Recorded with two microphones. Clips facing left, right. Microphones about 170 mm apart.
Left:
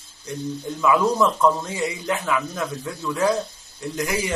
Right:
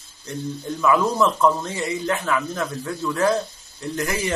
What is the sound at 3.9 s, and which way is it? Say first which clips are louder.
Speech: right 1 dB; 10° left (ahead or behind).